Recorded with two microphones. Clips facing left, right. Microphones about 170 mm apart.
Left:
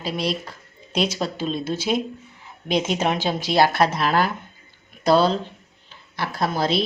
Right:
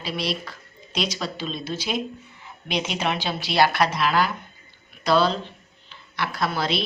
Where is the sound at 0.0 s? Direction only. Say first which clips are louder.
Left 3 dB; 45° left (ahead or behind).